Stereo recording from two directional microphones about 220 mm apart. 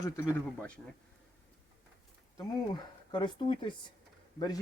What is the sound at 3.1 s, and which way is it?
Speech, 20° left (ahead or behind).